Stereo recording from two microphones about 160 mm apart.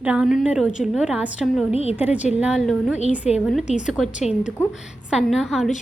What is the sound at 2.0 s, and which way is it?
A woman's voice, 10° right (ahead or behind).